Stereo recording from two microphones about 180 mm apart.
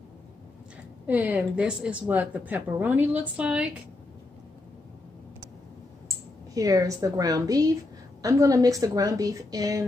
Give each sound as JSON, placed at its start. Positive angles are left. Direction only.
{"t": 1.0, "sound": "speech", "side_deg": -10}
{"t": 6.5, "sound": "a woman's voice", "side_deg": -20}